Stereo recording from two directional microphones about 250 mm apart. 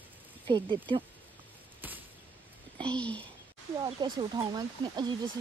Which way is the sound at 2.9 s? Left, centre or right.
Centre.